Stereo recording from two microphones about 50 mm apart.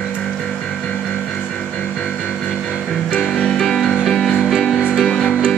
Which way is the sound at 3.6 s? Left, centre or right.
Centre.